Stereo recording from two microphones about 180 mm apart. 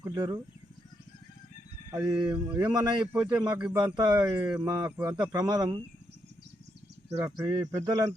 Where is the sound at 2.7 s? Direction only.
25° right (ahead or behind).